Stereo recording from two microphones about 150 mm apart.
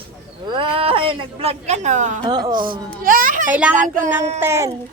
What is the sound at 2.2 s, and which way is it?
Speech, 25° right (ahead or behind).